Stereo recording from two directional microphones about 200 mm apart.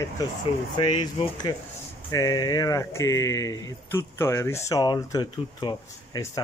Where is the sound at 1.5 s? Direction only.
20° left (ahead or behind).